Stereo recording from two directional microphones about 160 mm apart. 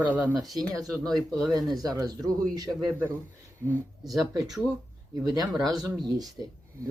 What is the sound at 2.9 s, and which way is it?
Speech, 15° right (ahead or behind).